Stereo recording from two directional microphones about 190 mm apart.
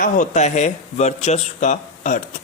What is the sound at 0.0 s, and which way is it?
A woman's voice, 40° left (ahead or behind).